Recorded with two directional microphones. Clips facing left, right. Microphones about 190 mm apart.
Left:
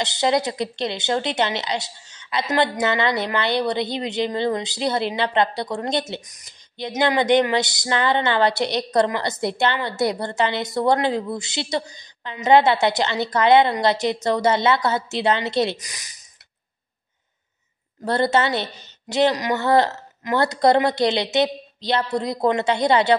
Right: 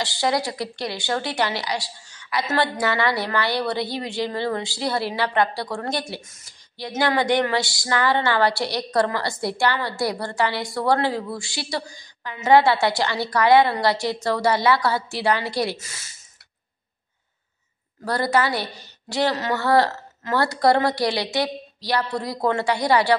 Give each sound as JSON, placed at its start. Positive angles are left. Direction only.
{"t": 0.0, "sound": "speech", "side_deg": 20}
{"t": 18.0, "sound": "speech", "side_deg": 25}